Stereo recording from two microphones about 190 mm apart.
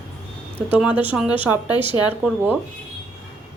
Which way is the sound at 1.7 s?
25° left (ahead or behind).